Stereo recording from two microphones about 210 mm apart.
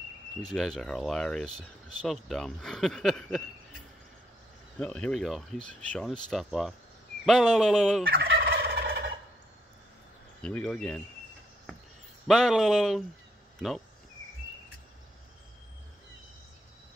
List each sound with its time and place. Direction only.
0.4 s speech: centre (ahead or behind)
4.7 s speech: 5° left (ahead or behind)
8.3 s fowl: 45° right (ahead or behind)
10.4 s speech: 5° left (ahead or behind)
12.3 s speech: centre (ahead or behind)